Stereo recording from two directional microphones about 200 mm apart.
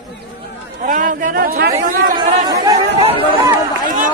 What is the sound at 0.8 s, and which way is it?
Speech, 40° right (ahead or behind).